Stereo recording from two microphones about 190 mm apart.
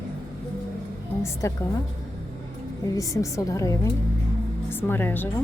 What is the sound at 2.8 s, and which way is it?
A woman's voice, 15° left (ahead or behind).